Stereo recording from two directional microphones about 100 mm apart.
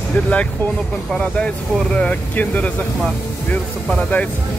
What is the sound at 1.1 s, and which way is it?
Speech, 10° left (ahead or behind).